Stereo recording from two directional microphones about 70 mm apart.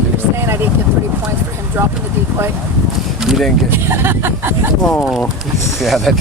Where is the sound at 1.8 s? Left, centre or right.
Right.